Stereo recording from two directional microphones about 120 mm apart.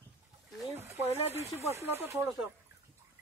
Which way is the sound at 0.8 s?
20° right (ahead or behind).